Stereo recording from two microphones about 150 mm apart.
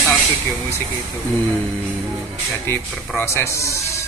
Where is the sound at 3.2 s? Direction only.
15° left (ahead or behind).